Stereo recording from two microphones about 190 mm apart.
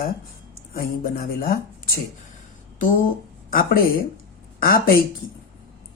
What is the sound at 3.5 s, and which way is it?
A woman's voice, 50° left (ahead or behind).